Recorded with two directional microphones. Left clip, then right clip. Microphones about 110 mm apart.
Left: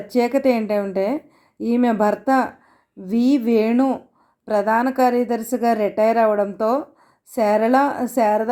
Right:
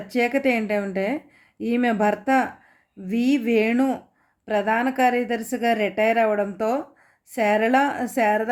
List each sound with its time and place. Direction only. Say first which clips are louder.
0.1 s a woman's voice: left 3 dB; 40° left (ahead or behind)